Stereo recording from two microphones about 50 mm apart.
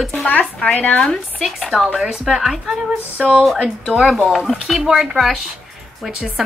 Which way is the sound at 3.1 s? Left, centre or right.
Centre.